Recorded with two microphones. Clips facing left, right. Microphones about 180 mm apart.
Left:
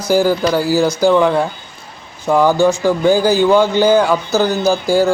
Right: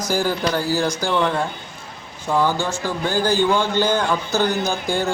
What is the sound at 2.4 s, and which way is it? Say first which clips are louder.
Speech: left 7 dB; 45° left (ahead or behind).